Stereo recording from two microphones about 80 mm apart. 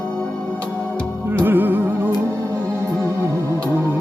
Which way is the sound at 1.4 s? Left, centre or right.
Right.